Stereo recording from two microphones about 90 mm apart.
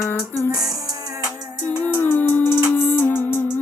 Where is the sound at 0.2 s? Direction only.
30° left (ahead or behind).